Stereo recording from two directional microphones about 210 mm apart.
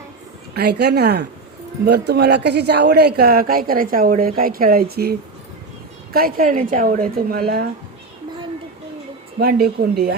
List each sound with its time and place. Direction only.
0.5 s speech: 50° right (ahead or behind)
6.1 s speech: 40° right (ahead or behind)
9.4 s speech: 45° right (ahead or behind)